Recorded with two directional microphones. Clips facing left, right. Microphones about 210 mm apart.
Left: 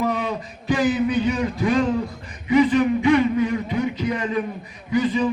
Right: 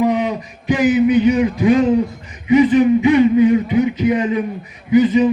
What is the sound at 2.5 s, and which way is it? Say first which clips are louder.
Speech: right 6 dB; 20° right (ahead or behind).